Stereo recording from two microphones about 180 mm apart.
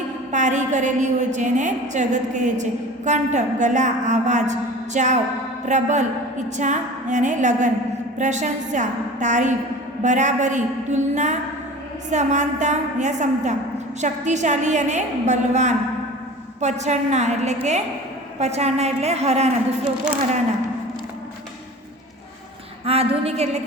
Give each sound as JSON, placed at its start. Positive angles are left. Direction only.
{"t": 0.3, "sound": "a woman's voice", "side_deg": -40}
{"t": 22.9, "sound": "a woman's voice", "side_deg": -35}